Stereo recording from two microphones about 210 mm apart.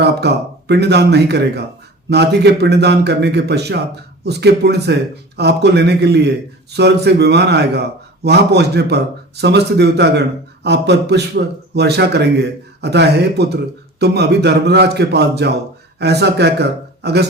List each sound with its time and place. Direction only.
0.0 s a man's voice: 50° right (ahead or behind)